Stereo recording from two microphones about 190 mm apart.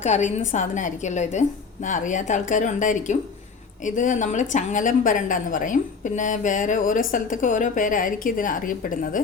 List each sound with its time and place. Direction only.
0.0 s a woman's voice: 40° left (ahead or behind)